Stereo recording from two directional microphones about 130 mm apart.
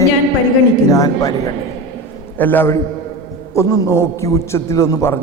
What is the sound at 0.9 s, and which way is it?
Speech, 25° left (ahead or behind).